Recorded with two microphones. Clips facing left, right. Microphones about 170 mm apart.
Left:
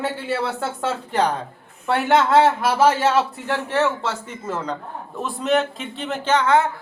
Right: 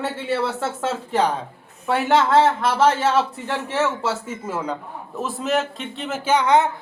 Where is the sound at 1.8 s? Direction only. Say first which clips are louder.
Even; centre (ahead or behind).